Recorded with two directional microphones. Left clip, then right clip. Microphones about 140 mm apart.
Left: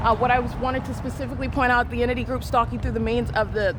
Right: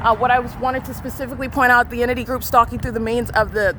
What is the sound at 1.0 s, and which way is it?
Speech, 45° right (ahead or behind).